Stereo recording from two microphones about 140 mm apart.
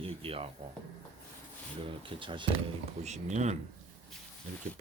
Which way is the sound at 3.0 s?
55° right (ahead or behind).